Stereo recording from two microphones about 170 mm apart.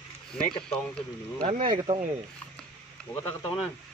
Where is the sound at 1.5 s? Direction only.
35° right (ahead or behind).